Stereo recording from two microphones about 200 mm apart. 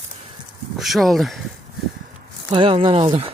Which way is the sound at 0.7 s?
Centre (ahead or behind).